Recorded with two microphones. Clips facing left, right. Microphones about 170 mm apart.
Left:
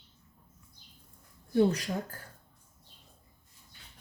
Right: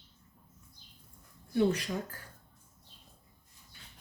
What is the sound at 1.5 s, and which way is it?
Speech, 40° left (ahead or behind).